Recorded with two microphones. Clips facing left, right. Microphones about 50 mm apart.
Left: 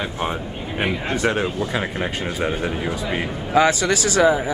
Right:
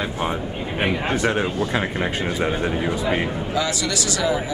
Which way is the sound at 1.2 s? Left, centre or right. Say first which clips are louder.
Even; centre.